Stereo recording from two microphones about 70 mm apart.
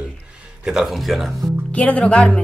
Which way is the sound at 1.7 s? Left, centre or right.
Left.